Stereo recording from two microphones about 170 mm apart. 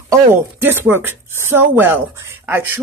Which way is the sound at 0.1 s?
15° right (ahead or behind).